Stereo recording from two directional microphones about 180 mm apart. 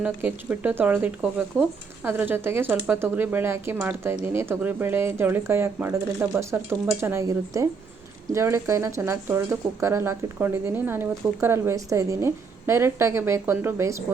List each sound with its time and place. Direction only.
0.0 s speech: 10° right (ahead or behind)